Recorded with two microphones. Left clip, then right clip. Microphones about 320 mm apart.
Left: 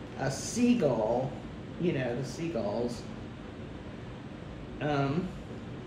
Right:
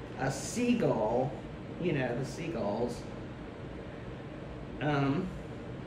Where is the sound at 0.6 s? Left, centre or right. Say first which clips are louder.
Left 3 dB; centre.